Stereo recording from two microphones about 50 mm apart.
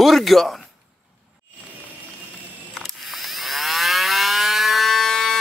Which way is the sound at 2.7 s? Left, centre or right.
Centre.